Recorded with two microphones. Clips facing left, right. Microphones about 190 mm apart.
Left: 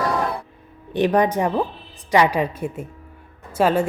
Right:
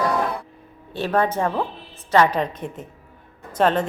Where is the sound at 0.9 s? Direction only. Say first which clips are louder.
Left 3 dB; 15° left (ahead or behind).